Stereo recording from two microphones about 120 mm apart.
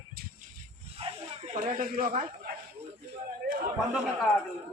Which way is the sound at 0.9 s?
55° right (ahead or behind).